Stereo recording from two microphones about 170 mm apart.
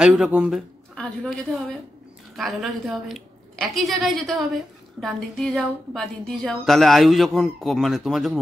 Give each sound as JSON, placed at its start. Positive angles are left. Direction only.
{"t": 0.0, "sound": "a woman's voice", "side_deg": -5}